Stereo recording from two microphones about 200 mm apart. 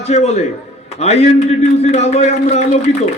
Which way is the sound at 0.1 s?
35° left (ahead or behind).